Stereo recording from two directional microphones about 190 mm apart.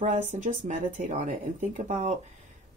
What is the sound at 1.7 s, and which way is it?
Speech, 40° right (ahead or behind).